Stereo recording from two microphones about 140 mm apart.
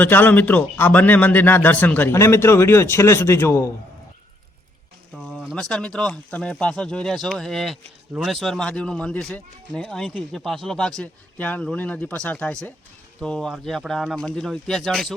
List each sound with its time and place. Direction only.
0.0 s speech: 15° left (ahead or behind)
5.5 s speech: 5° left (ahead or behind)